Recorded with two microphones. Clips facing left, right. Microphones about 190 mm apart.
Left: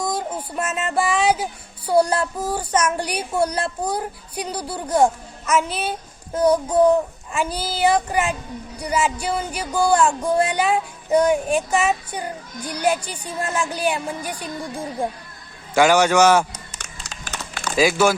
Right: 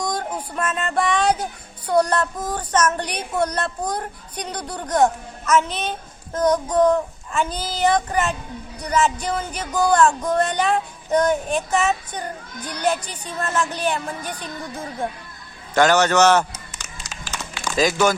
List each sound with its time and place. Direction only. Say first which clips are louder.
0.0 s a sound: left 1 dB; 5° left (ahead or behind)
1.9 s speech: left 1 dB; 10° left (ahead or behind)
16.8 s music: even; 65° left (ahead or behind)
17.7 s speech: left 1 dB; 10° left (ahead or behind)